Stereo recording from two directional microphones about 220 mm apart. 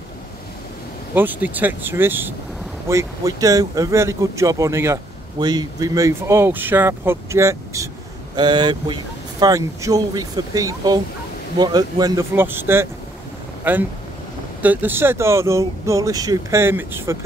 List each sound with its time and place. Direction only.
1.1 s speech: 10° right (ahead or behind)